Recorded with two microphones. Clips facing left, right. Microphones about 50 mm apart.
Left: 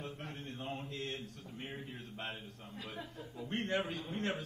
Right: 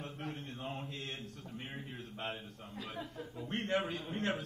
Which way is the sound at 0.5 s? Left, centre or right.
Right.